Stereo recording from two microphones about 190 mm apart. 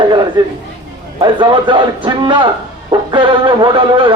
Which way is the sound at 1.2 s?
25° right (ahead or behind).